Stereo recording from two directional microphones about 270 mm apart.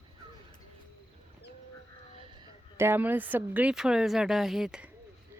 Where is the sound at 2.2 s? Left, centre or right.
Centre.